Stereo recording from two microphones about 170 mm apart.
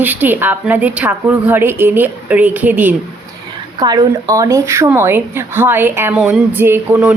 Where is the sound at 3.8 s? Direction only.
20° right (ahead or behind).